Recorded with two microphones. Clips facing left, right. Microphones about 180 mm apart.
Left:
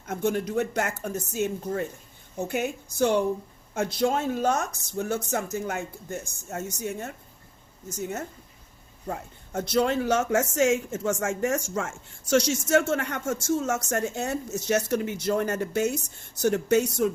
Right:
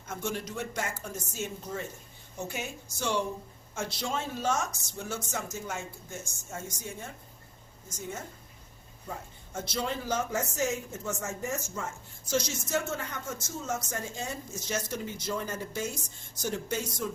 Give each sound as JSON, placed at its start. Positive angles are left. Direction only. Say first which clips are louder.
{"t": 0.1, "sound": "speech", "louder": "left 9 dB", "side_deg": 60}